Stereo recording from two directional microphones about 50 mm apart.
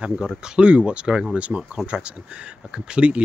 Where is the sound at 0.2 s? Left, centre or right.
Centre.